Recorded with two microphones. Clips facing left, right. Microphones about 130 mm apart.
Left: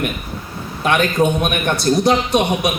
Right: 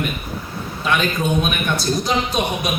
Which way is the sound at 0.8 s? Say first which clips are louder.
Left 5 dB; 60° left (ahead or behind).